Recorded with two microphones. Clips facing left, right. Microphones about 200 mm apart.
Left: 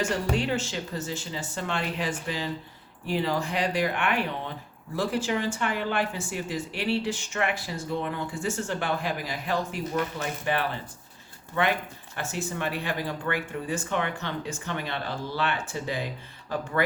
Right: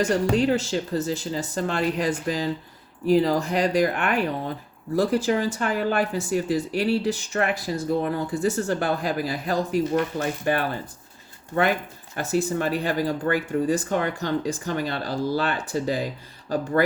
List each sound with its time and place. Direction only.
0.0 s speech: 40° right (ahead or behind)